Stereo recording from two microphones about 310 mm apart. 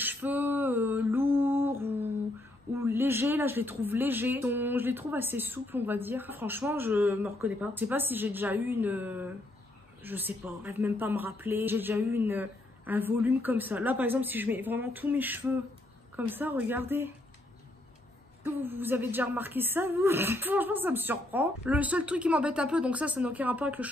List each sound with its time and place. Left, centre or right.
0.0 s a sound: centre
2.8 s speech: centre
18.4 s speech: centre